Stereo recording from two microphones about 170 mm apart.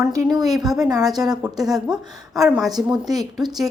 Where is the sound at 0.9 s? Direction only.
20° right (ahead or behind).